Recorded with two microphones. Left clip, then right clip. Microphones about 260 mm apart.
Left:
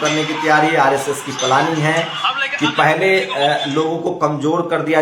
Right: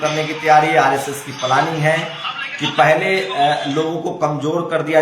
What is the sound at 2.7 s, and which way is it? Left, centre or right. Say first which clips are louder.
A man's voice: right 1 dB; centre.